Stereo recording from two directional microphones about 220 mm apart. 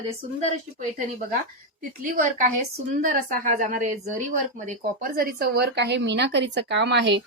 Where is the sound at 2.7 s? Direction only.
35° right (ahead or behind).